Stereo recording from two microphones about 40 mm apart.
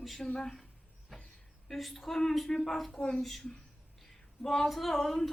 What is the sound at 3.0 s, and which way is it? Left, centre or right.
Speech, centre.